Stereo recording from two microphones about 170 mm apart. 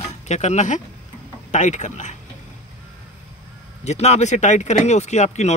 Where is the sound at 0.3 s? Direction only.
45° left (ahead or behind).